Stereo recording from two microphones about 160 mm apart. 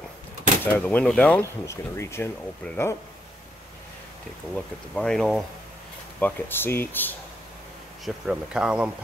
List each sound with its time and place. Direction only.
0.7 s speech: 10° left (ahead or behind)
4.6 s speech: 5° left (ahead or behind)
8.0 s speech: 5° right (ahead or behind)